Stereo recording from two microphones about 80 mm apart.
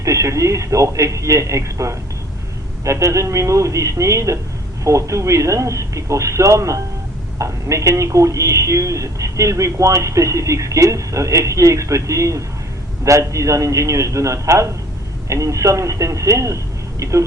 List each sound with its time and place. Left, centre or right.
0.0 s speech: right